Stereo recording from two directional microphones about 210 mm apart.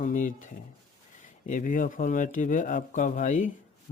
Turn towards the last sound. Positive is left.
turn(degrees=35)  # may be behind; listen again after turning